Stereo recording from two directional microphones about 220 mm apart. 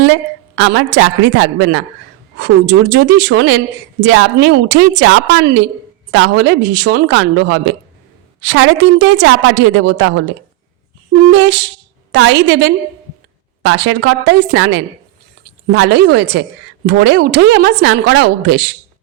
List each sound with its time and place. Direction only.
0.0 s a woman's voice: 60° right (ahead or behind)
2.9 s a woman's voice: 50° right (ahead or behind)
5.4 s a woman's voice: 45° right (ahead or behind)
6.1 s a woman's voice: 60° right (ahead or behind)
11.3 s a woman's voice: 50° right (ahead or behind)